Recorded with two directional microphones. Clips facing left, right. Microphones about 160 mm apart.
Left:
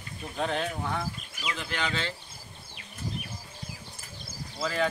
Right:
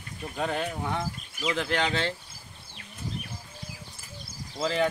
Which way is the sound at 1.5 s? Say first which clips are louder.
Right 5 dB; 70° right (ahead or behind).